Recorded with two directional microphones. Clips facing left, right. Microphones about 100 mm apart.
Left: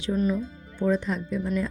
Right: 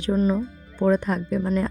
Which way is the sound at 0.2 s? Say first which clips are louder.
Right 3 dB; 35° right (ahead or behind).